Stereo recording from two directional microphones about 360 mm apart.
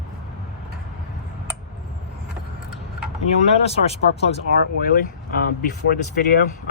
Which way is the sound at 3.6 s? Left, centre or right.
Centre.